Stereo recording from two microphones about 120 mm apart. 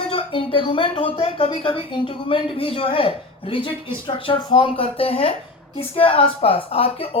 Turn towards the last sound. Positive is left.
turn(degrees=55)  # may be behind; listen again after turning